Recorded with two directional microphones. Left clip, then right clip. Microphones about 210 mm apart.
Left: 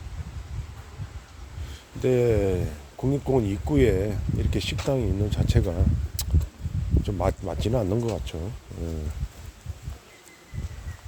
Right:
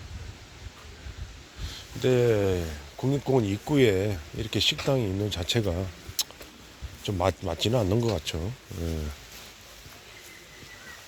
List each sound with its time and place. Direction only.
2.0 s speech: 20° left (ahead or behind)
6.2 s a sound: 15° left (ahead or behind)
7.0 s speech: 10° left (ahead or behind)